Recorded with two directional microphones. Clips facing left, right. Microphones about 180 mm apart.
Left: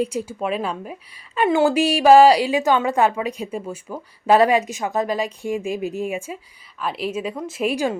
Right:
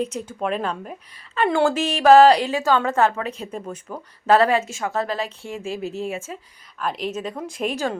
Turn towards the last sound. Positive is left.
turn(degrees=10)  # may be behind; listen again after turning